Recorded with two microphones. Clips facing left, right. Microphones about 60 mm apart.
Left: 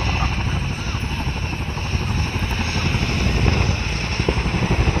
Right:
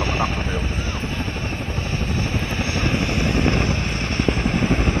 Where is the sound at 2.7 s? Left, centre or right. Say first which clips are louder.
Right 3 dB; centre.